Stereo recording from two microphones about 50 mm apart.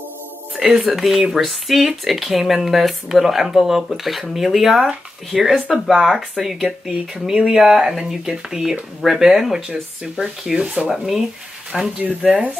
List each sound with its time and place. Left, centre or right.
0.6 s speech: centre
7.2 s speech: centre
12.3 s speech: right